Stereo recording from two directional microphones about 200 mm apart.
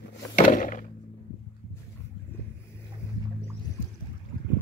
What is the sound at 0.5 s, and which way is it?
Thunk, 40° left (ahead or behind).